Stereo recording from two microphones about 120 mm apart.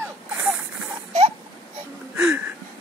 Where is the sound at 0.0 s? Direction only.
15° right (ahead or behind).